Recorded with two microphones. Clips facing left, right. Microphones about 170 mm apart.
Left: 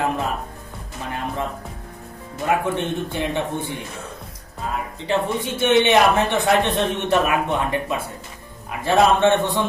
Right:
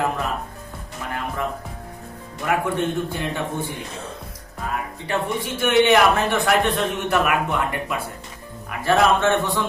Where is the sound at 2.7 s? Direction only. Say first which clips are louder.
Right 1 dB; 20° left (ahead or behind).